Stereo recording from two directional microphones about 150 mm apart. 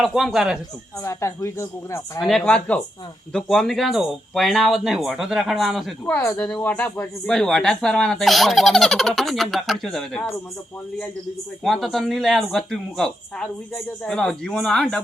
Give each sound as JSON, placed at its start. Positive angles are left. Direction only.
{"t": 0.0, "sound": "speech", "side_deg": 0}
{"t": 1.0, "sound": "a woman's voice", "side_deg": 20}
{"t": 2.2, "sound": "speech", "side_deg": 5}
{"t": 6.1, "sound": "speech", "side_deg": 15}
{"t": 11.6, "sound": "speech", "side_deg": 0}